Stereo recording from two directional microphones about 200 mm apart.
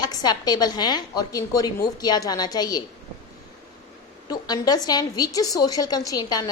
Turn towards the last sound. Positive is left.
turn(degrees=20)  # may be behind; listen again after turning